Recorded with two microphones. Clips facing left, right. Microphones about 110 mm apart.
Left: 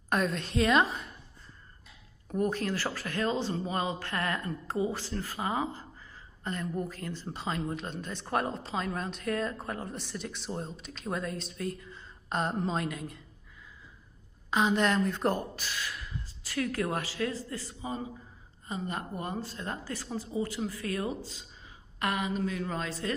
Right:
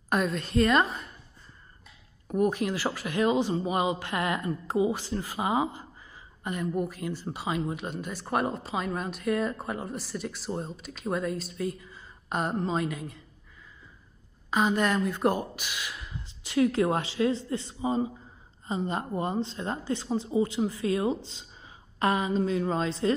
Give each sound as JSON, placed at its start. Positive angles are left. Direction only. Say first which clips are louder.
{"t": 0.1, "sound": "a woman's voice", "louder": "right 3 dB", "side_deg": 0}
{"t": 2.2, "sound": "a man's voice", "louder": "right 4 dB", "side_deg": -10}
{"t": 14.5, "sound": "a woman's voice", "louder": "right 1 dB", "side_deg": 0}